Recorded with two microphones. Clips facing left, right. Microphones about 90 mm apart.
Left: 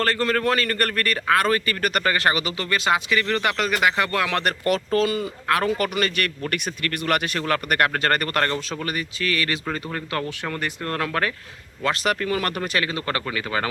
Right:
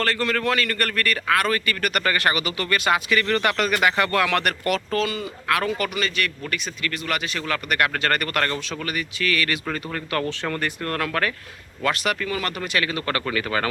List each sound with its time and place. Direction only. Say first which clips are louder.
0.0 s a man's voice: left 1 dB; 35° left (ahead or behind); by 10.7 s 10° left (ahead or behind)
10.8 s a man's voice: left 1 dB; 20° left (ahead or behind)